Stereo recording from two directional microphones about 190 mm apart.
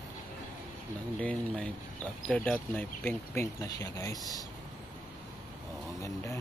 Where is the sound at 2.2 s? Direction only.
5° left (ahead or behind).